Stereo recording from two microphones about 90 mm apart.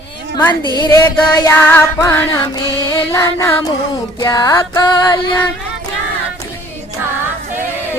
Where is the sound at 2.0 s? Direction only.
40° left (ahead or behind).